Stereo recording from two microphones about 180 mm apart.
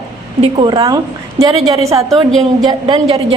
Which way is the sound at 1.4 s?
35° right (ahead or behind).